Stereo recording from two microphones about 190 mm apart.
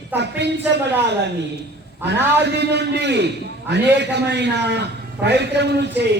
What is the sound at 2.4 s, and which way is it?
A man's voice, 65° right (ahead or behind).